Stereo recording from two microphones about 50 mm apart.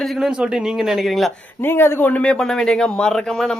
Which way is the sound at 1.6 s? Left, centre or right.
Left.